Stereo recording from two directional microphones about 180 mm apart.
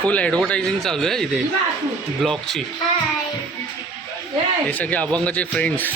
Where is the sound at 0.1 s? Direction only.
5° left (ahead or behind).